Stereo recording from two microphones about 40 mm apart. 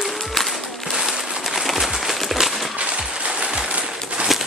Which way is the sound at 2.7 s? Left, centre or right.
Right.